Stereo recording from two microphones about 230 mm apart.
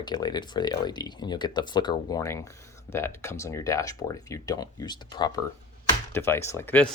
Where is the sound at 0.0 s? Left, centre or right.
Centre.